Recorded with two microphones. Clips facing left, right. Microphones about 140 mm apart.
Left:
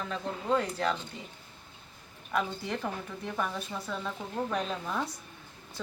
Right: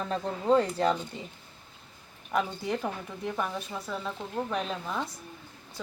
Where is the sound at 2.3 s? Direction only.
15° right (ahead or behind).